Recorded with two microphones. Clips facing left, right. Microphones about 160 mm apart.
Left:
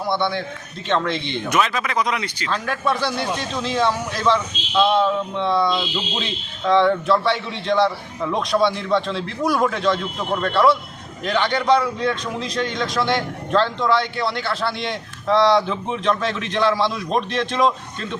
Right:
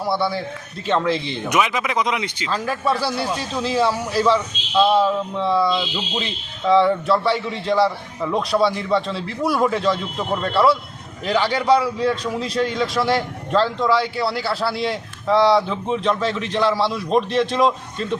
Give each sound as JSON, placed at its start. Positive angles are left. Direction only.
{"t": 0.1, "sound": "a man's voice", "side_deg": -5}
{"t": 1.5, "sound": "a man's voice", "side_deg": -15}
{"t": 2.5, "sound": "a man's voice", "side_deg": -5}